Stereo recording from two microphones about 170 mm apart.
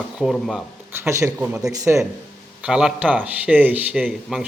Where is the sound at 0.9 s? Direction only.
15° right (ahead or behind).